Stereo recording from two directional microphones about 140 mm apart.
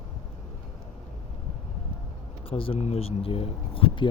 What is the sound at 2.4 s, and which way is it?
Speech, 40° left (ahead or behind).